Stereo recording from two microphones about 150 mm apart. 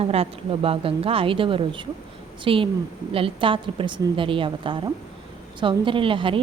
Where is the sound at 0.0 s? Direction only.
40° right (ahead or behind).